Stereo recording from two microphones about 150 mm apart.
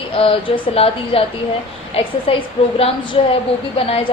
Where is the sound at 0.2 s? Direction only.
35° left (ahead or behind).